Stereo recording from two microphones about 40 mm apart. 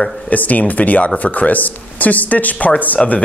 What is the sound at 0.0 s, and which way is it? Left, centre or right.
Speech, left.